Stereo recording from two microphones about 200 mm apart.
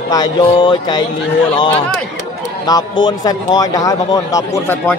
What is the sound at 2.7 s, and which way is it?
A man's voice, 20° left (ahead or behind).